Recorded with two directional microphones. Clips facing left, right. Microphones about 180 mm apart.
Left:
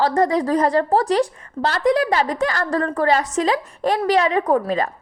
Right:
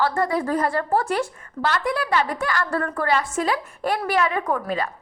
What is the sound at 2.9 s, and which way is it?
Speech, 35° left (ahead or behind).